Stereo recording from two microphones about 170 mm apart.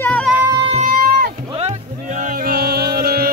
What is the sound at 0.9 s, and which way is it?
Rowboat, 60° right (ahead or behind).